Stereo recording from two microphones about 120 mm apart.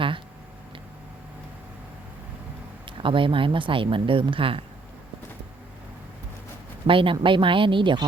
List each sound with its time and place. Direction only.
2.8 s speech: 45° right (ahead or behind)
6.8 s speech: 45° right (ahead or behind)